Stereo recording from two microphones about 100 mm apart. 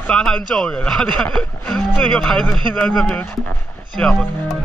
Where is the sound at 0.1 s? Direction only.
5° left (ahead or behind).